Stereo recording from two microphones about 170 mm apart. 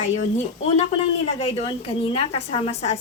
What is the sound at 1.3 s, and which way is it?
A woman's voice, 40° left (ahead or behind).